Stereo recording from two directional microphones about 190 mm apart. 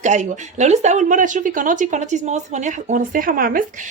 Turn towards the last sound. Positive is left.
turn(degrees=-50)  # may be behind; listen again after turning